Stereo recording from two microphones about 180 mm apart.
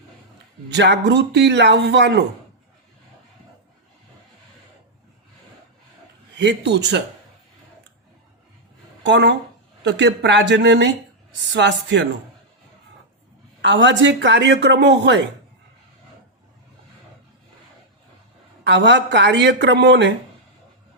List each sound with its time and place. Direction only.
0.7 s speech: 75° right (ahead or behind)
6.3 s speech: 75° right (ahead or behind)
9.0 s speech: 75° right (ahead or behind)
9.8 s speech: 85° right
13.6 s speech: 80° right
18.6 s speech: 75° right (ahead or behind)